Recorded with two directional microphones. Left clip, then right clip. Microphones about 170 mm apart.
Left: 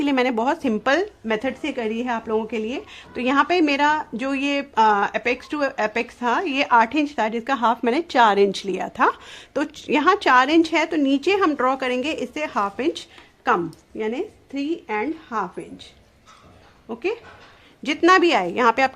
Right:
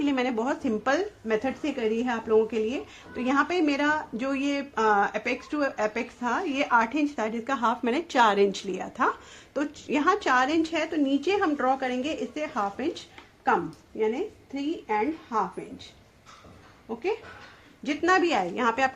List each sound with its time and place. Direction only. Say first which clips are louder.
0.0 s speech: left 6 dB; 45° left (ahead or behind); by 13.0 s 65° left (ahead or behind)
14.0 s speech: left 1 dB; 60° left (ahead or behind)
17.8 s speech: left 7 dB; 65° left (ahead or behind)